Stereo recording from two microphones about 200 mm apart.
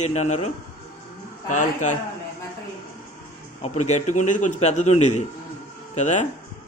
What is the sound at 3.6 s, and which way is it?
A man's voice, 35° left (ahead or behind).